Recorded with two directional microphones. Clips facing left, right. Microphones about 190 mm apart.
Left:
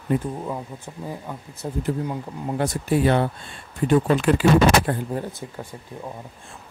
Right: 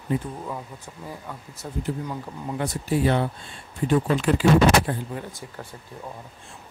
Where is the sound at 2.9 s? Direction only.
55° left (ahead or behind).